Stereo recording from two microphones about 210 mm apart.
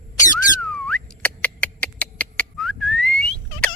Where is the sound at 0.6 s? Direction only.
5° left (ahead or behind).